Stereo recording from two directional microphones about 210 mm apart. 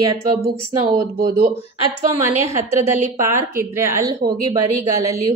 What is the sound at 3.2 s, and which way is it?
A woman's voice, 15° right (ahead or behind).